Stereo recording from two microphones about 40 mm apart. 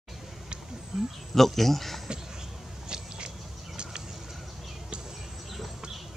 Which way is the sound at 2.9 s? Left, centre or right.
Right.